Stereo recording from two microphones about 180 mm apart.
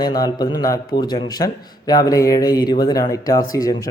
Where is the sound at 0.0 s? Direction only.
20° left (ahead or behind).